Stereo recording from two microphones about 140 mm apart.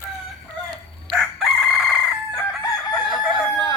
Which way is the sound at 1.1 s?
Centre (ahead or behind).